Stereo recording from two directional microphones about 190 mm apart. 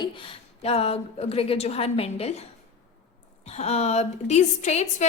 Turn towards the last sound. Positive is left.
turn(degrees=35)  # may be behind; listen again after turning